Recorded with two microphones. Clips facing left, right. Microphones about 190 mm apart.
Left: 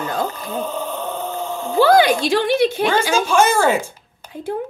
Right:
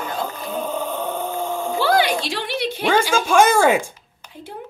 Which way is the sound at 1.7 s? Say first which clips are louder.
Left 6 dB; 45° left (ahead or behind).